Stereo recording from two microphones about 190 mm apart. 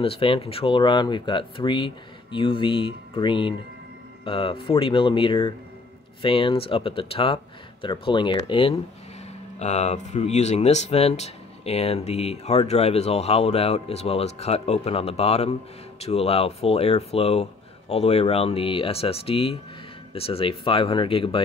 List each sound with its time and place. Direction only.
0.0 s speech: 30° left (ahead or behind)